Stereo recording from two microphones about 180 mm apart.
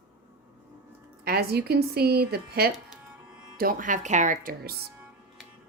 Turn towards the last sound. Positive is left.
turn(degrees=-50)  # may be behind; listen again after turning